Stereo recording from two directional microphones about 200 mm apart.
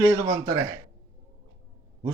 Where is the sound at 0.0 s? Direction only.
20° right (ahead or behind).